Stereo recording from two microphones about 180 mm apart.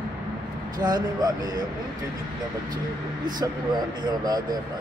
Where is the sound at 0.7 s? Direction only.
20° right (ahead or behind).